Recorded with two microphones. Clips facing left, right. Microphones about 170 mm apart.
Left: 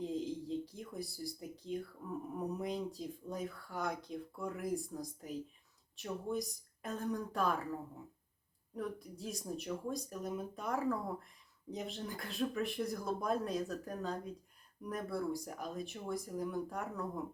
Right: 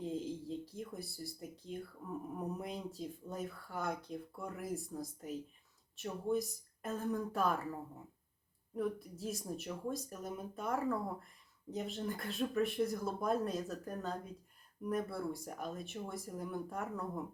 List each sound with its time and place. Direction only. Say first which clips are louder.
0.0 s speech: left 1 dB; centre (ahead or behind)
8.7 s speech: right 4 dB; 5° right (ahead or behind)